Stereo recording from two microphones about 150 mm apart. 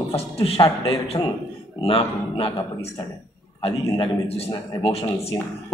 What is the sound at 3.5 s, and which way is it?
A man's voice, 35° left (ahead or behind).